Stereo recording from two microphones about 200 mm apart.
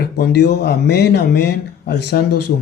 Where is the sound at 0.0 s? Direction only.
55° left (ahead or behind).